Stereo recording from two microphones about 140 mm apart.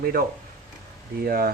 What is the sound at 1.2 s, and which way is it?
Speech, 90° right.